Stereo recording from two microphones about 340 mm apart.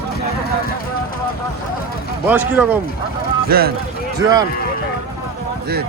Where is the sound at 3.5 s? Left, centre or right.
Right.